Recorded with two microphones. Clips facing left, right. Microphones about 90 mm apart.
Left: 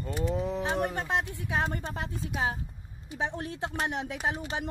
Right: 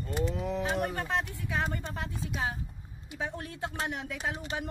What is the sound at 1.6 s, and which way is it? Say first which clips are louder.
Speech: left 2 dB; 30° left (ahead or behind).